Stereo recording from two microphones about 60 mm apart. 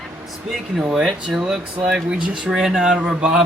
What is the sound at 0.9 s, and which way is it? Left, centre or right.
A man's voice, centre.